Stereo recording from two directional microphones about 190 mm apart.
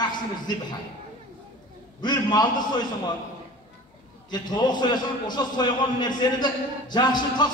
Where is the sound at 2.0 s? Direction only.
25° left (ahead or behind).